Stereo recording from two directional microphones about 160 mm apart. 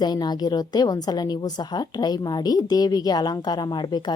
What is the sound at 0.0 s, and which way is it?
A woman's voice, 25° left (ahead or behind).